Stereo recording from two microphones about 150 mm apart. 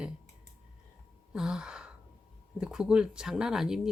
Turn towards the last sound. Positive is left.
turn(degrees=-5)  # may be behind; listen again after turning